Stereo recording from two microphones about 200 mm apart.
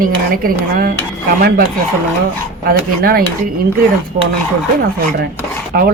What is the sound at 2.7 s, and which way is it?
Speech, 45° right (ahead or behind).